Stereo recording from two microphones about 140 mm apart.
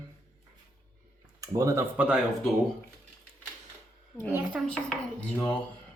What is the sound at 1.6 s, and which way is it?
Speech, 20° right (ahead or behind).